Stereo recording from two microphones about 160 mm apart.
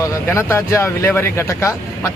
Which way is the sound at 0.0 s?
15° left (ahead or behind).